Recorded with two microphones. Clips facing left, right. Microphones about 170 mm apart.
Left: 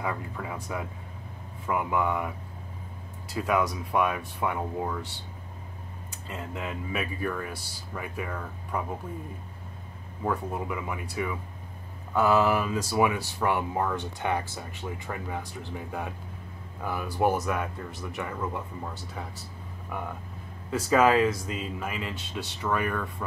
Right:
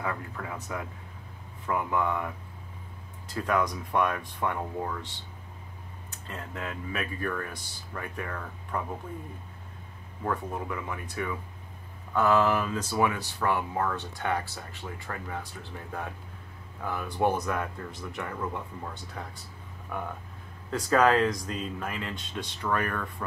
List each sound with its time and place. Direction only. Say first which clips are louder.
0.0 s speech: left 1 dB; 15° left (ahead or behind)
3.3 s speech: left 1 dB; 10° left (ahead or behind)
6.2 s speech: left 2 dB; 10° left (ahead or behind)
10.2 s speech: left 2 dB; 10° left (ahead or behind)
16.8 s speech: left 1 dB; 10° left (ahead or behind)
20.7 s speech: left 1 dB; 5° left (ahead or behind)